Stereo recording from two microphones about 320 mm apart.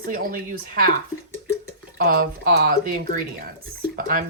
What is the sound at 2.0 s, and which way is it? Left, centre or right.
Speech, right.